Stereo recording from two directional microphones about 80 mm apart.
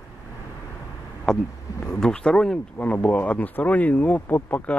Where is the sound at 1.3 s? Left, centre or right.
Centre.